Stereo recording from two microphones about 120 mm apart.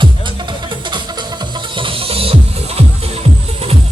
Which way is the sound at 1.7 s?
45° right (ahead or behind).